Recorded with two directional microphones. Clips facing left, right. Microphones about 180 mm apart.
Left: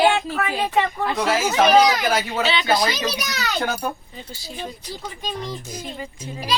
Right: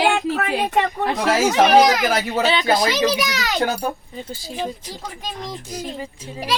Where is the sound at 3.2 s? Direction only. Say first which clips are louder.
Right 4 dB; 90° right.